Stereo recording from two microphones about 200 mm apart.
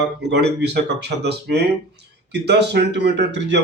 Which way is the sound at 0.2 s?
55° right (ahead or behind).